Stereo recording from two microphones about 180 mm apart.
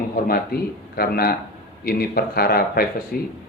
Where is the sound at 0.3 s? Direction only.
55° left (ahead or behind).